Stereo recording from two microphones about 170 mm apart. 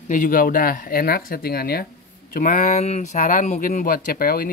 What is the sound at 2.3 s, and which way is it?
Speech, 50° left (ahead or behind).